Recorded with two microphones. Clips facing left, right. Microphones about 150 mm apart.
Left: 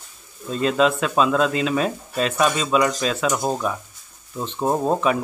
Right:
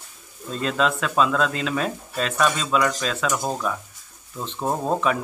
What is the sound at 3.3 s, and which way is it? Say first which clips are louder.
Speech: left 3 dB; 20° left (ahead or behind).